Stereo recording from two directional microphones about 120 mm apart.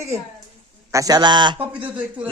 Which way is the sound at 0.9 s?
30° right (ahead or behind).